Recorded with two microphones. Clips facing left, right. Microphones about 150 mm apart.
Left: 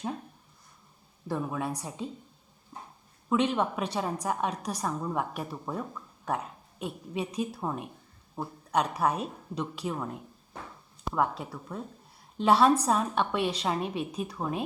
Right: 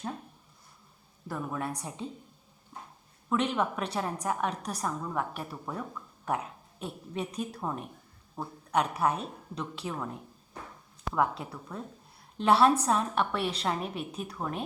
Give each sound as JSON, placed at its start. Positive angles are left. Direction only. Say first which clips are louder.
{"t": 1.3, "sound": "a woman's voice", "louder": "left 3 dB", "side_deg": 10}
{"t": 3.2, "sound": "a woman's voice", "louder": "left 2 dB", "side_deg": 5}
{"t": 6.2, "sound": "a sound", "louder": "even", "side_deg": 0}
{"t": 7.1, "sound": "a woman's voice", "louder": "left 3 dB", "side_deg": 10}
{"t": 8.7, "sound": "a woman's voice", "louder": "even", "side_deg": -5}